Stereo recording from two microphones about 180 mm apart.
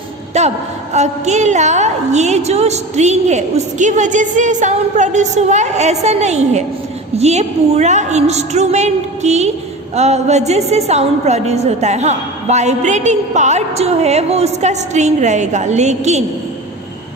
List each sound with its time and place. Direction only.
0.4 s a woman's voice: 40° right (ahead or behind)